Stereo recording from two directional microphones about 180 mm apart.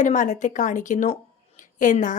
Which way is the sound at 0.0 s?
45° left (ahead or behind).